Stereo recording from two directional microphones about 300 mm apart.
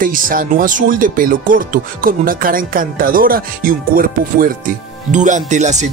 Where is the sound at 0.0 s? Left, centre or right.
Right.